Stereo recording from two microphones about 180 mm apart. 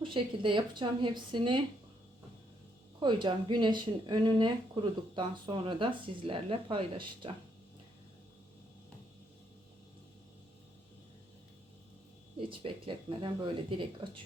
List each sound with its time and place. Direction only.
0.0 s speech: 25° right (ahead or behind)
3.0 s speech: 25° right (ahead or behind)
12.4 s speech: 30° right (ahead or behind)